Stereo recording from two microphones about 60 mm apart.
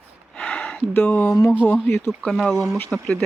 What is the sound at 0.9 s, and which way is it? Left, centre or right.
Speech, left.